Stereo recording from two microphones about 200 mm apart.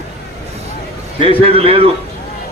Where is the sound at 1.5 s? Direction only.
30° right (ahead or behind).